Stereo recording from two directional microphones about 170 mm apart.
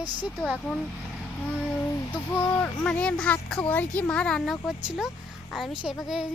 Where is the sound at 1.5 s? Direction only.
5° left (ahead or behind).